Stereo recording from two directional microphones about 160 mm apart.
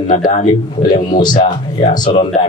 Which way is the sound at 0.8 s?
25° left (ahead or behind).